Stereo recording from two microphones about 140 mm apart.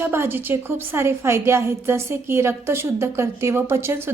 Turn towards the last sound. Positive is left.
turn(degrees=-15)  # may be behind; listen again after turning